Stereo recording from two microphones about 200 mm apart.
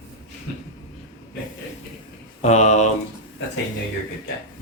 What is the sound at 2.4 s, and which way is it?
Speech, 35° left (ahead or behind).